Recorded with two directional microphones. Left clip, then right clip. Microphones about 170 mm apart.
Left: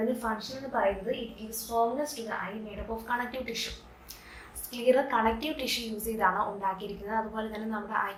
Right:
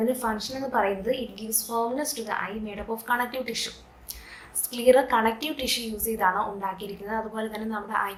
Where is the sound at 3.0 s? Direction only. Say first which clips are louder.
Right 6 dB; 35° right (ahead or behind).